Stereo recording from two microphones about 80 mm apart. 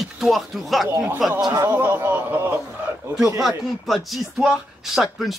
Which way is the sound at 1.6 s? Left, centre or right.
Right.